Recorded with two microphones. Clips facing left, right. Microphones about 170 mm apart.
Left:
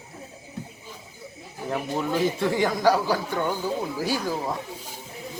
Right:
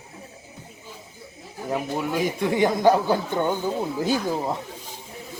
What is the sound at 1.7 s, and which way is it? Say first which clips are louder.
A man's voice: right 1 dB; 10° right (ahead or behind).